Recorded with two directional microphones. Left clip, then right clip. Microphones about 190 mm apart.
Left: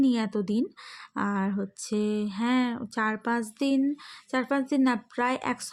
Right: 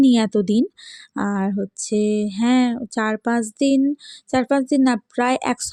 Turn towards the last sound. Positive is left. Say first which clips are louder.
# right 8 dB
turn(degrees=-35)  # may be behind; listen again after turning